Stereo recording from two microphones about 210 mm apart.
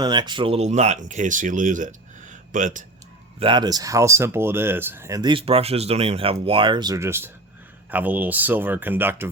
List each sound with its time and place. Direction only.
0.0 s speech: 20° right (ahead or behind); by 2.8 s 35° right (ahead or behind)
3.4 s speech: 20° right (ahead or behind)